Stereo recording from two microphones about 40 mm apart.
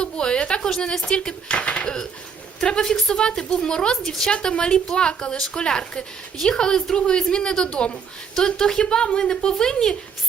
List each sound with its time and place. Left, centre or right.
0.0 s a woman's voice: left